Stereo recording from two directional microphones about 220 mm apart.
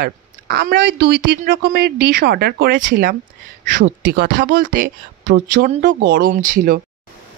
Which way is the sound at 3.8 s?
55° right (ahead or behind).